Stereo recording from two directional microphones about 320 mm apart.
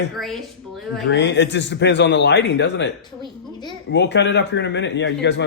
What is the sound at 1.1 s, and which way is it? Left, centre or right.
A man's voice, left.